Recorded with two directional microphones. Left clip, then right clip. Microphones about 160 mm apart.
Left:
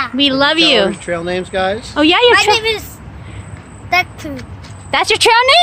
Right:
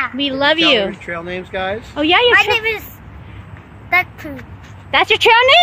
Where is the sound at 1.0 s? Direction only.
90° left.